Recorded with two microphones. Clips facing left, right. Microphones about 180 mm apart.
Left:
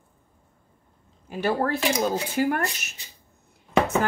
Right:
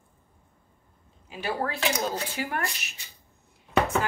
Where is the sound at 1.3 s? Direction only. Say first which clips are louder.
Left 6 dB; 45° left (ahead or behind).